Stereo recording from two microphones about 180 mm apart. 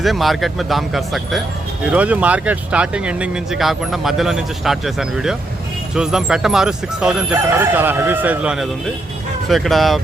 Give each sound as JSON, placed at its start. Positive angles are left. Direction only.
{"t": 0.0, "sound": "speech", "side_deg": 0}